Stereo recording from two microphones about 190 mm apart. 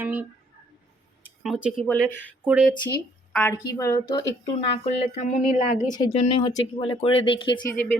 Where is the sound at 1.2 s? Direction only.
5° right (ahead or behind).